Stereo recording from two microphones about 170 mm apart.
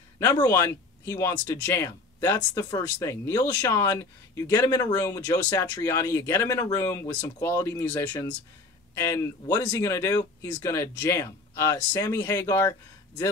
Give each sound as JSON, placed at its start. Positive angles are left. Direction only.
{"t": 0.2, "sound": "speech", "side_deg": 15}